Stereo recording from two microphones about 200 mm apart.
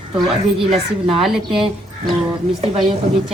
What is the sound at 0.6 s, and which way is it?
Speech, 30° right (ahead or behind).